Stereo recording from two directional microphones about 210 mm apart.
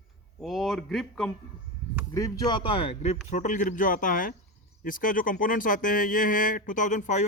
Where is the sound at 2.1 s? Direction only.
15° left (ahead or behind); by 7.2 s 35° left (ahead or behind).